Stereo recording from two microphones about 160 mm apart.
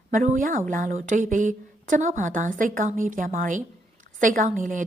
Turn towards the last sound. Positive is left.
turn(degrees=-55)  # may be behind; listen again after turning